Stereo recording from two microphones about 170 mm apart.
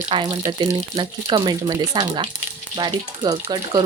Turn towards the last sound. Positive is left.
turn(degrees=-25)  # may be behind; listen again after turning